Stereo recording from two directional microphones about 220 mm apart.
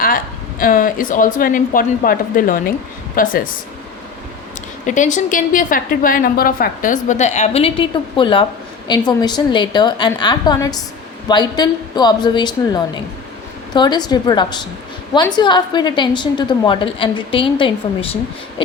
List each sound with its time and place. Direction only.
0.6 s a woman's voice: 40° left (ahead or behind)
4.9 s a woman's voice: 35° left (ahead or behind)